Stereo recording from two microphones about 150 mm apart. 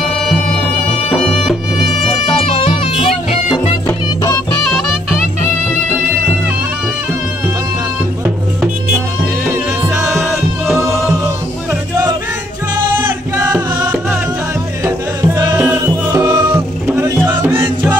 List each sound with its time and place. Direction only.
1.1 s music: centre (ahead or behind)
2.7 s music: 35° left (ahead or behind)
3.8 s music: 20° left (ahead or behind)
4.6 s music: 5° left (ahead or behind)
9.5 s music: 5° right (ahead or behind)
14.9 s music: 20° right (ahead or behind)